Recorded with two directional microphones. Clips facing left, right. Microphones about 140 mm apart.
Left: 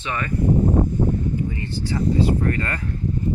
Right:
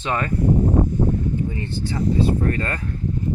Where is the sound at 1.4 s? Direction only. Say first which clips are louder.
Even; 25° right (ahead or behind).